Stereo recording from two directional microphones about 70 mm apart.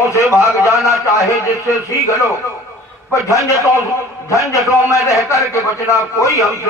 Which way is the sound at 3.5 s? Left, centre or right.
Left.